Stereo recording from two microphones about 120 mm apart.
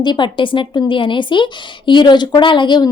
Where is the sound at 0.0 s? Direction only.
40° left (ahead or behind).